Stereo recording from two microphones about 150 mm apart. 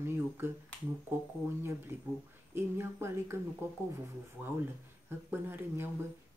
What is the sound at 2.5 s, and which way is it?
Speech, 15° right (ahead or behind).